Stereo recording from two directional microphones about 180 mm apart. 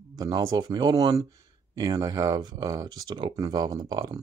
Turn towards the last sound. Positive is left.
turn(degrees=-20)  # may be behind; listen again after turning